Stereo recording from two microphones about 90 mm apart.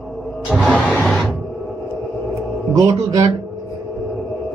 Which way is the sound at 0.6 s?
15° left (ahead or behind).